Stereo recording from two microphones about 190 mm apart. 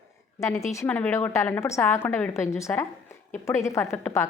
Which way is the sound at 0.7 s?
15° left (ahead or behind).